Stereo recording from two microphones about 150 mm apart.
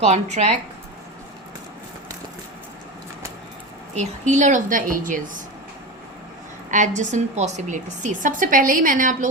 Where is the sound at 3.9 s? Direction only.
50° right (ahead or behind).